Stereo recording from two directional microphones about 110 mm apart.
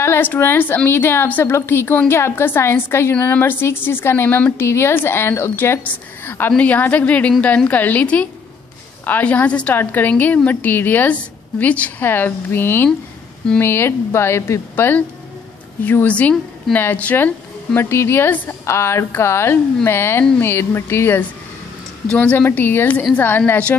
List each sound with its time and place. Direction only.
0.0 s a woman's voice: 20° left (ahead or behind)